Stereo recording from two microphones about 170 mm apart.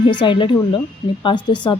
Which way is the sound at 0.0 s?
25° left (ahead or behind).